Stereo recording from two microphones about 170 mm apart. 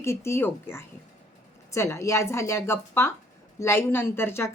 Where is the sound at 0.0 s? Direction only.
15° left (ahead or behind).